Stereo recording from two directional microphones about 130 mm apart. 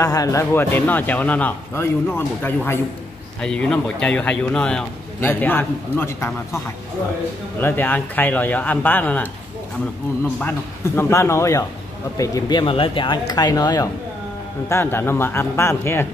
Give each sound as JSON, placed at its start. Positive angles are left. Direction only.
{"t": 0.0, "sound": "a man's voice", "side_deg": 25}
{"t": 7.6, "sound": "a man's voice", "side_deg": 15}
{"t": 11.0, "sound": "speech", "side_deg": 20}
{"t": 14.7, "sound": "speech", "side_deg": 20}